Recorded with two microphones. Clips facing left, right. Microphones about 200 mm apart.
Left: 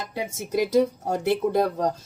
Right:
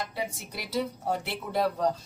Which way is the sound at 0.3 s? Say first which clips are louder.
Left 15 dB; 45° left (ahead or behind).